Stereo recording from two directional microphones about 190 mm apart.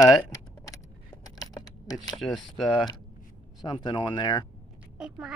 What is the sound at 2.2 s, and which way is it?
Speech, centre (ahead or behind).